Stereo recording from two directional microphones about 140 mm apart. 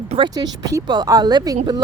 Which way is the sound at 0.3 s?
30° right (ahead or behind).